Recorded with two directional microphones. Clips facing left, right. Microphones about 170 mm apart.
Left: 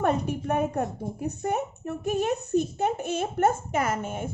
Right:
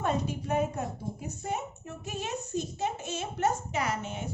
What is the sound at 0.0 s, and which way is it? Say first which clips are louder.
A woman's voice: left 5 dB; 60° left (ahead or behind).